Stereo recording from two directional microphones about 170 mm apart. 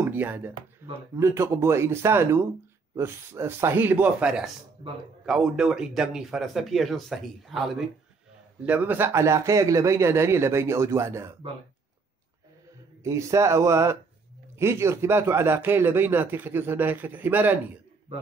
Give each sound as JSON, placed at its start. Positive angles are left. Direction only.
{"t": 0.0, "sound": "speech", "side_deg": -10}
{"t": 13.0, "sound": "speech", "side_deg": -15}